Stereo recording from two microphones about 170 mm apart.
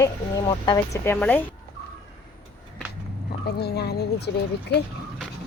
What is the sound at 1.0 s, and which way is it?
Speech, 10° left (ahead or behind).